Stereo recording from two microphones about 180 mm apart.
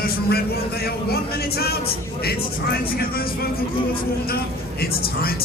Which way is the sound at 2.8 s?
55° left (ahead or behind).